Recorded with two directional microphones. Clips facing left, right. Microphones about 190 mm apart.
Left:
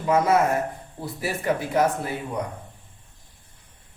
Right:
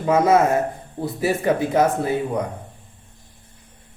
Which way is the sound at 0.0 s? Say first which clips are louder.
Right 4 dB; 25° right (ahead or behind).